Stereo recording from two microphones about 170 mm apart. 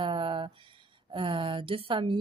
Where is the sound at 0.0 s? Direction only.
30° right (ahead or behind).